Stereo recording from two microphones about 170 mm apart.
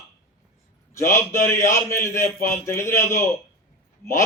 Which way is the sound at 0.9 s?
15° left (ahead or behind).